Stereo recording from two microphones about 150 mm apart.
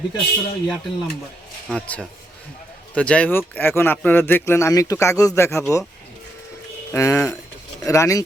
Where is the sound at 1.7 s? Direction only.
10° left (ahead or behind).